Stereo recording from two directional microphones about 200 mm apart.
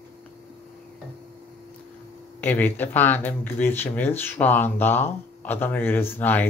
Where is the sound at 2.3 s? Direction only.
10° left (ahead or behind).